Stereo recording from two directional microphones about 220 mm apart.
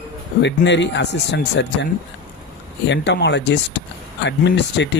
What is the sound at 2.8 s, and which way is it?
Speech, 50° left (ahead or behind).